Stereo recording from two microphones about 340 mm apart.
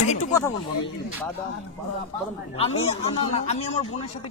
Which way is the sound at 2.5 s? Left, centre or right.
Centre.